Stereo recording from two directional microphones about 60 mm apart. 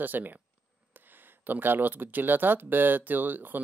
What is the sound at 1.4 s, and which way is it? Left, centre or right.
Speech, right.